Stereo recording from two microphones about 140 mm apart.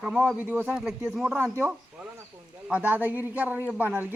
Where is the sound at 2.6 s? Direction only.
10° right (ahead or behind).